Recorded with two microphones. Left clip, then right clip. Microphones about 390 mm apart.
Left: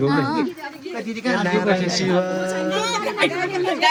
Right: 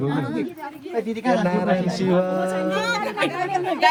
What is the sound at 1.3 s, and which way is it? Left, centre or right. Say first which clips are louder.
Speech: left 2 dB; right.